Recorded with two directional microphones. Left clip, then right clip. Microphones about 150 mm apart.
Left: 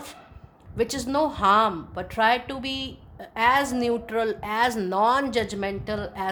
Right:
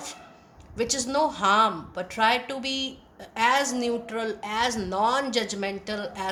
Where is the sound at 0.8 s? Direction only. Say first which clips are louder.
Left 1 dB; 50° left (ahead or behind).